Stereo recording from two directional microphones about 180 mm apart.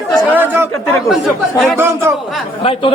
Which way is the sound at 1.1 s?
Centre (ahead or behind).